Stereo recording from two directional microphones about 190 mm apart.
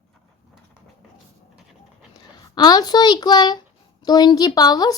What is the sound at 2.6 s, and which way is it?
A woman's voice, 20° left (ahead or behind).